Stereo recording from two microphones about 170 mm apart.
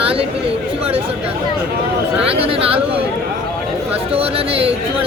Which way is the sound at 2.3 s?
35° right (ahead or behind).